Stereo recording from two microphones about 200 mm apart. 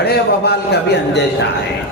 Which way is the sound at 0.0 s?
55° left (ahead or behind).